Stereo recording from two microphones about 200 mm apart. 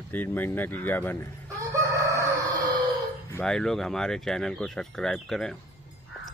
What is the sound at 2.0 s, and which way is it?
Chicken, 15° right (ahead or behind).